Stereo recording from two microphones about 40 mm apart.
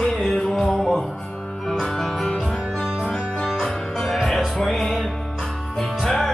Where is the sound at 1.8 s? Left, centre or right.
Centre.